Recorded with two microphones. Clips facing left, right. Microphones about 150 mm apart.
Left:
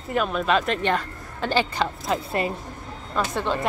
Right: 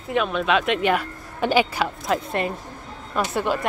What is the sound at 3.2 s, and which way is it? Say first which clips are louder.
Speech: right 2 dB; 10° right (ahead or behind).